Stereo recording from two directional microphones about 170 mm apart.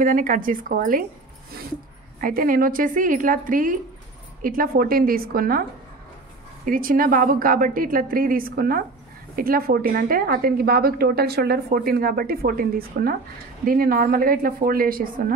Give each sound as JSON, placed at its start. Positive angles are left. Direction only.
{"t": 0.0, "sound": "a woman's voice", "side_deg": -50}
{"t": 2.2, "sound": "a woman's voice", "side_deg": -55}